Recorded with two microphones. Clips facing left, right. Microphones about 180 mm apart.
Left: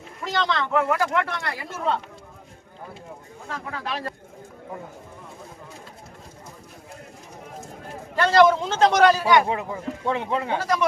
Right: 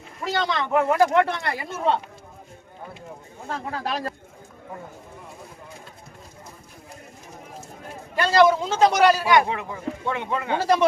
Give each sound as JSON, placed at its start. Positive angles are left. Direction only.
{"t": 0.3, "sound": "a man's voice", "side_deg": -15}
{"t": 0.9, "sound": "speech", "side_deg": -30}
{"t": 3.5, "sound": "speech", "side_deg": -35}
{"t": 8.1, "sound": "a man's voice", "side_deg": -10}
{"t": 10.1, "sound": "speech", "side_deg": 30}
{"t": 10.5, "sound": "speech", "side_deg": -30}